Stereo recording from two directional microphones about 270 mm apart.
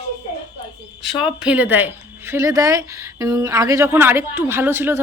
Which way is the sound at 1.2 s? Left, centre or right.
Centre.